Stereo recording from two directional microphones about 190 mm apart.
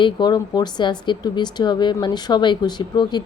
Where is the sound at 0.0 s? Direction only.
20° left (ahead or behind).